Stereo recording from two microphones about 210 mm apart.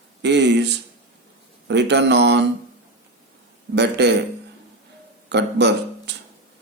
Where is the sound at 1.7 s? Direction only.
55° right (ahead or behind).